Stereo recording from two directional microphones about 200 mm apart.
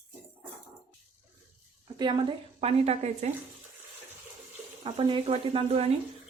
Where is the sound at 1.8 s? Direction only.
25° right (ahead or behind).